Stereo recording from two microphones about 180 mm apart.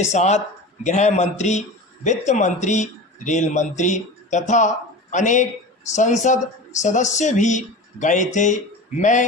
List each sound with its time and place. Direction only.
0.0 s speech: 40° left (ahead or behind)